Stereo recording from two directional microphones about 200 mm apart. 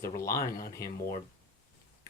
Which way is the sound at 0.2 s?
15° left (ahead or behind).